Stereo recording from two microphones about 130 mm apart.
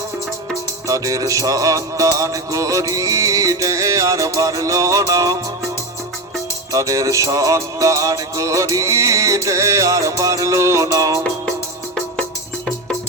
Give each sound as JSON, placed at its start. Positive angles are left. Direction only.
{"t": 0.9, "sound": "music", "side_deg": -25}
{"t": 6.7, "sound": "music", "side_deg": -25}